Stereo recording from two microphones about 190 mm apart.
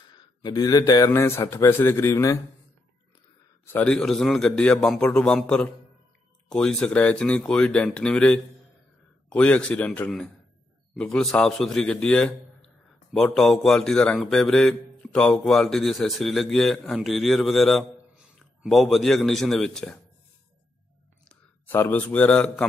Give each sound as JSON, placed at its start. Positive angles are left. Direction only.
{"t": 0.1, "sound": "speech", "side_deg": 20}
{"t": 3.6, "sound": "a man's voice", "side_deg": 10}
{"t": 21.3, "sound": "speech", "side_deg": 10}